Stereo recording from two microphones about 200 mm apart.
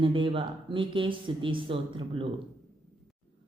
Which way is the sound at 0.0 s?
25° right (ahead or behind).